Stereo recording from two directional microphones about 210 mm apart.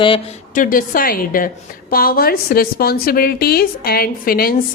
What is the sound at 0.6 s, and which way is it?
A woman's voice, 40° left (ahead or behind).